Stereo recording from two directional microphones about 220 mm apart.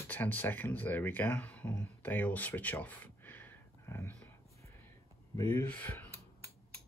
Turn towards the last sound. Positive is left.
turn(degrees=10)  # may be behind; listen again after turning